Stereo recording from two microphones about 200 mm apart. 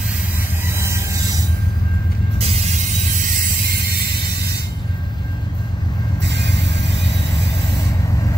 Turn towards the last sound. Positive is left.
turn(degrees=-60)  # may be behind; listen again after turning